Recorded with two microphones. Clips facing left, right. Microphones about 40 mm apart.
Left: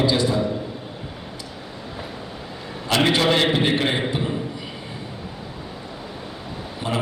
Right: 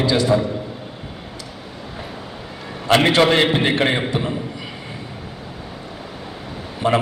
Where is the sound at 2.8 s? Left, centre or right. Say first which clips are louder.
Right 4 dB; right.